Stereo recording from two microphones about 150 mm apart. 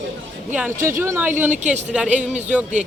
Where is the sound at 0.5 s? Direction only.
15° right (ahead or behind).